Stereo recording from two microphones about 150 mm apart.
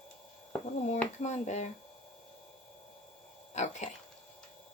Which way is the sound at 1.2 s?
50° left (ahead or behind).